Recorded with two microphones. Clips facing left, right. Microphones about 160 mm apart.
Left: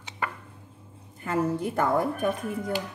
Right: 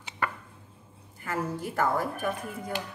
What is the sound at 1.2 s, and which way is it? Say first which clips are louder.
A woman's voice: left 6 dB; 20° left (ahead or behind).